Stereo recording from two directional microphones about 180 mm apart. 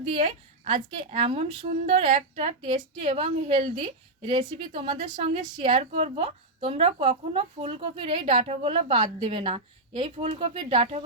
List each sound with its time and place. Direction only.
0.2 s a woman's voice: 35° right (ahead or behind)
4.9 s a woman's voice: 40° right (ahead or behind)